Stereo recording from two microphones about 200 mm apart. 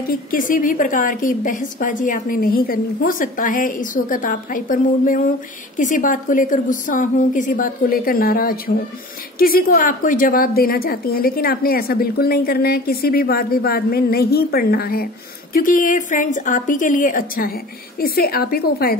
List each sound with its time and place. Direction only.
0.1 s a woman's voice: 45° left (ahead or behind)